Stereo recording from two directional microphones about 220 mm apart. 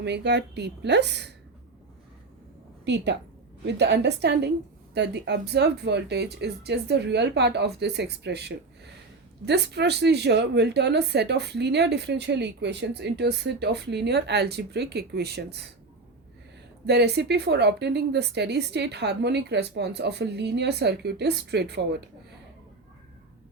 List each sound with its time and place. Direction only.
0.0 s speech: 50° right (ahead or behind)
2.8 s speech: 50° right (ahead or behind)
16.8 s speech: 50° right (ahead or behind)